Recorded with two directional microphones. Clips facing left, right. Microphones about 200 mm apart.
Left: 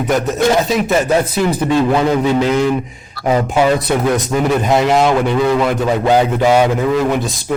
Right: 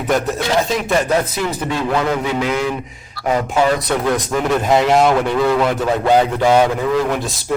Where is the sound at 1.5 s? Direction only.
20° left (ahead or behind).